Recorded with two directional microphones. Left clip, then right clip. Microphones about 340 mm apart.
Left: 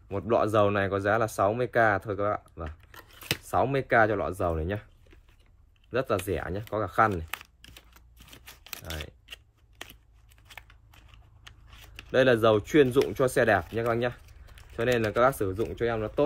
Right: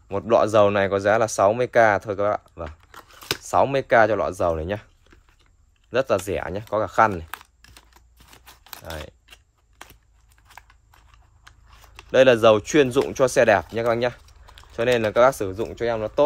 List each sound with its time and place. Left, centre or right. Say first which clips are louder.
0.1 s speech: right 7 dB; right
5.9 s speech: right 6 dB; right
7.2 s typing: right 1 dB; centre
8.6 s a sound: right 4 dB; centre
10.5 s scissors: right 1 dB; centre
11.4 s a sound: right 1 dB; centre
12.1 s speech: right 7 dB; right